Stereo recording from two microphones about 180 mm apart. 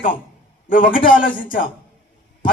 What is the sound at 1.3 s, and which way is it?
Speech, 50° left (ahead or behind).